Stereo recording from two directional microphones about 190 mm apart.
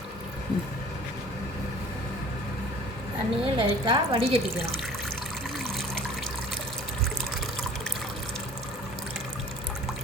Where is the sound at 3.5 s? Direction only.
25° right (ahead or behind).